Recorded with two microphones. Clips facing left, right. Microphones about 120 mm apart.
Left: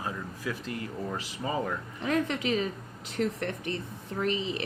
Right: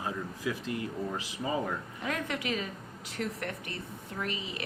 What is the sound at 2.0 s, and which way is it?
A woman's voice, 30° left (ahead or behind).